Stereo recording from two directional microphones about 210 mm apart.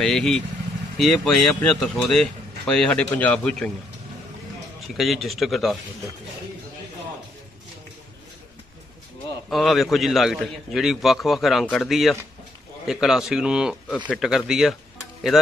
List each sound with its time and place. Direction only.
0.0 s speech: centre (ahead or behind)
4.9 s speech: centre (ahead or behind)
9.5 s speech: centre (ahead or behind)